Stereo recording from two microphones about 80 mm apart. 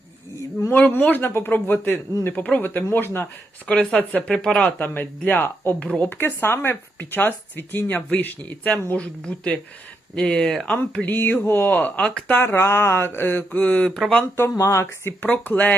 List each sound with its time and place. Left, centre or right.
0.7 s speech: left
3.7 s speech: centre
11.0 s speech: left
12.4 s speech: left
14.6 s speech: left